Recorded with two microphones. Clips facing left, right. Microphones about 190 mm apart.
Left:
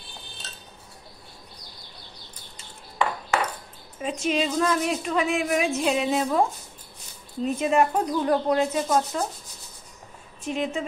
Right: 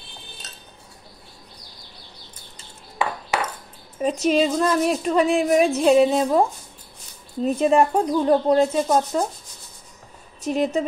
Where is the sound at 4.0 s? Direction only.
40° right (ahead or behind).